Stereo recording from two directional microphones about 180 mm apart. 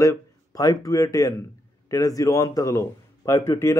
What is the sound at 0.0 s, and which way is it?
A man's voice, 20° left (ahead or behind).